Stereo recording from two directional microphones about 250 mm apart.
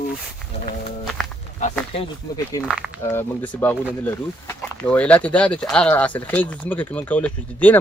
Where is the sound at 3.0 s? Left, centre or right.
Centre.